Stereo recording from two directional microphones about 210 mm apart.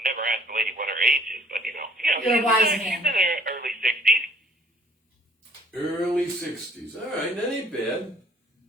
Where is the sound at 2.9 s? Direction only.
45° right (ahead or behind).